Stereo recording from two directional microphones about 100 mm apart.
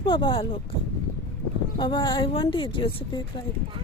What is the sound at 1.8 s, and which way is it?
Speech, 50° left (ahead or behind).